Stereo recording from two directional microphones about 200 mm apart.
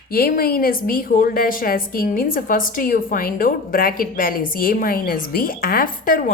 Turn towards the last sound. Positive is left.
turn(degrees=45)  # may be behind; listen again after turning